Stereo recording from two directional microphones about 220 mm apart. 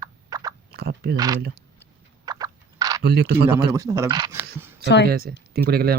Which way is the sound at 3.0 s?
50° right (ahead or behind).